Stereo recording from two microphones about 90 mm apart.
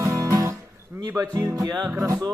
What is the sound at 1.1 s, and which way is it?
Speech, 40° right (ahead or behind).